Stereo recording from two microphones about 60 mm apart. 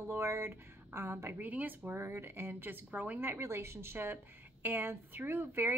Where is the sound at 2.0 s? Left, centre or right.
Right.